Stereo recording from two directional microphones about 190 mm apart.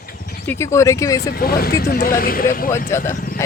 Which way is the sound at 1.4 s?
50° left (ahead or behind).